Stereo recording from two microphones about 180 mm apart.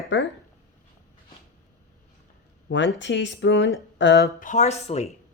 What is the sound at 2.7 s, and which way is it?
Speech, 90° left.